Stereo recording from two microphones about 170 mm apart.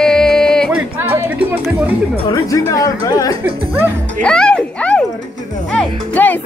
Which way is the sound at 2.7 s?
20° left (ahead or behind).